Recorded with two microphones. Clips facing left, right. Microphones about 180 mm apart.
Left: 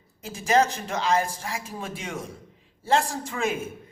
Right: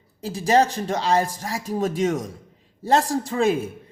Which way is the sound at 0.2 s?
35° right (ahead or behind).